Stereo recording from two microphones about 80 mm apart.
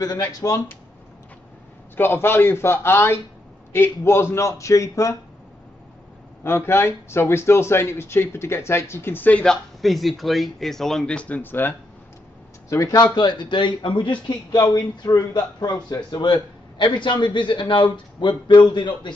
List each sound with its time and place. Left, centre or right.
0.0 s speech: left
2.0 s a man's voice: left
6.4 s speech: left
9.4 s speech: centre; by 11.7 s left
12.6 s a man's voice: left
14.5 s a man's voice: left